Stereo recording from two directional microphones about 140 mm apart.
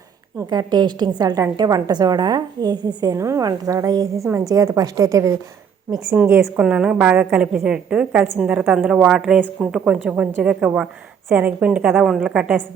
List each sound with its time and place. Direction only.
0.5 s a woman's voice: 30° right (ahead or behind); by 12.6 s 5° right (ahead or behind)